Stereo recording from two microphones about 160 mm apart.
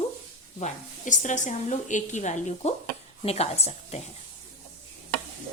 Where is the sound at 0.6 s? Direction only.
50° left (ahead or behind).